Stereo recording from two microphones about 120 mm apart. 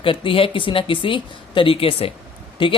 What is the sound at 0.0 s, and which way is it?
Speech, 45° left (ahead or behind).